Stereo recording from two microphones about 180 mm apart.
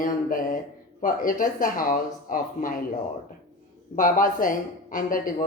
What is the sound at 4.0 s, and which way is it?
Speech, 50° left (ahead or behind).